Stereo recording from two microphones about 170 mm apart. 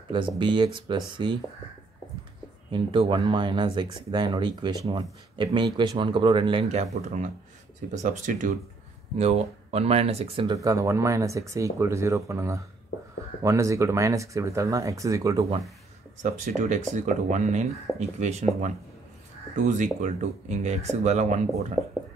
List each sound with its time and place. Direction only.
0.4 s speech: 30° right (ahead or behind)
2.7 s speech: 30° right (ahead or behind); by 8.5 s 50° right (ahead or behind)
9.2 s speech: 35° right (ahead or behind)
10.5 s speech: 20° right (ahead or behind)
16.2 s speech: 45° right (ahead or behind)
19.5 s speech: 45° right (ahead or behind)